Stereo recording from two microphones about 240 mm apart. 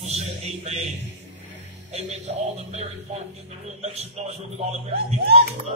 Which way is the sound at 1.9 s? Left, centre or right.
Right.